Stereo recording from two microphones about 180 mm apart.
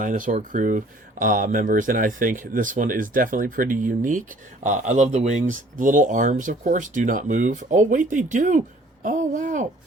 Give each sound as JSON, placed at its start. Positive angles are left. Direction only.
{"t": 0.0, "sound": "speech", "side_deg": -45}